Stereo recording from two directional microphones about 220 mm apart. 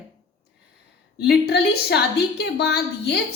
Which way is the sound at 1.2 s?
50° left (ahead or behind).